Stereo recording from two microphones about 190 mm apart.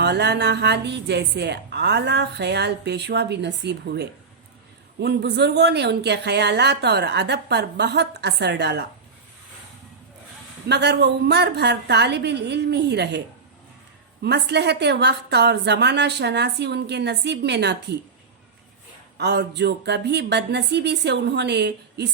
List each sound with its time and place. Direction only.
0.0 s a woman's voice: 60° right (ahead or behind)
10.7 s a woman's voice: 60° right (ahead or behind)
19.1 s a woman's voice: 60° right (ahead or behind)